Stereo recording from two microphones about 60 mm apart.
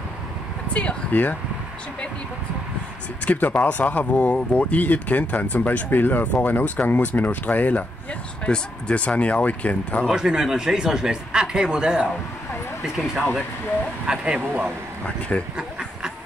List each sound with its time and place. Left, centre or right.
0.7 s speech: left
3.3 s speech: left
10.1 s speech: centre
15.0 s speech: left